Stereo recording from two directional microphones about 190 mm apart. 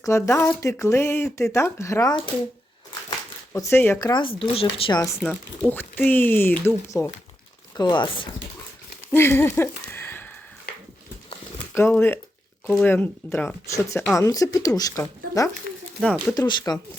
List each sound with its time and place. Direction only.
0.0 s speech: 15° left (ahead or behind)
3.5 s speech: 15° left (ahead or behind)
4.0 s speech: 25° left (ahead or behind)
5.2 s speech: 5° left (ahead or behind)
7.8 s speech: 25° left (ahead or behind)
9.1 s a sound: 15° left (ahead or behind)
11.7 s speech: 10° left (ahead or behind)
16.0 s speech: 5° left (ahead or behind)
16.3 s speech: 20° left (ahead or behind)